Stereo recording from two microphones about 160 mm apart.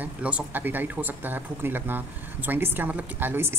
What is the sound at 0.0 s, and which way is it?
Speech, 10° right (ahead or behind).